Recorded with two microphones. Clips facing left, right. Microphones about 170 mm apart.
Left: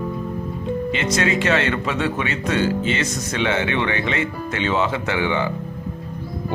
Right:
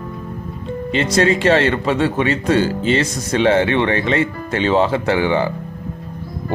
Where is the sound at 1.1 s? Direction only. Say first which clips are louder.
Right 6 dB; 35° right (ahead or behind).